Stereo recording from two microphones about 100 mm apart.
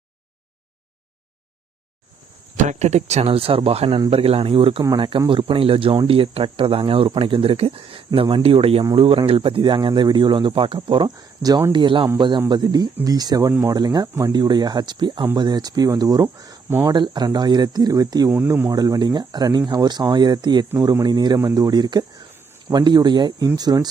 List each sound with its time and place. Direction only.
2.8 s speech: 90° right; by 4.8 s 65° right (ahead or behind)
4.9 s speech: 55° right (ahead or behind); by 18.3 s 40° right (ahead or behind)
18.3 s speech: 20° right (ahead or behind)
18.7 s speech: 40° right (ahead or behind)